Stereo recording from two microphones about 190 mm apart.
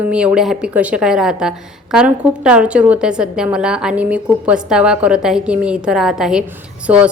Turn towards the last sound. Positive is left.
turn(degrees=-5)  # may be behind; listen again after turning